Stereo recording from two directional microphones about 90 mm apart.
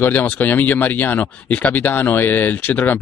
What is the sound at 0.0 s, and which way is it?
Speech, 20° left (ahead or behind).